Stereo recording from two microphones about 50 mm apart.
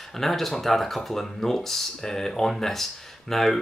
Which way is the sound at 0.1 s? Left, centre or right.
Centre.